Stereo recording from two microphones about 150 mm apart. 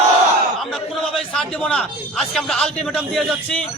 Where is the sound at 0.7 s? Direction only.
5° left (ahead or behind).